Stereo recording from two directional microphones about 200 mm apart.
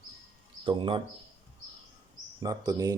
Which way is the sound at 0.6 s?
25° right (ahead or behind).